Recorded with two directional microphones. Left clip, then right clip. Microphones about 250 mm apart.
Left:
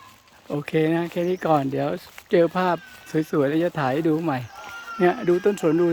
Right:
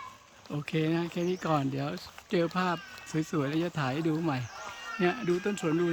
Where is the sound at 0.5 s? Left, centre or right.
Centre.